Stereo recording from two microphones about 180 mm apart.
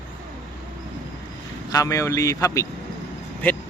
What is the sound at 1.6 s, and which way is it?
Speech, 20° left (ahead or behind).